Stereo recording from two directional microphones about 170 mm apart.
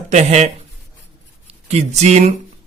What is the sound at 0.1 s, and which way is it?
Speech, 40° right (ahead or behind).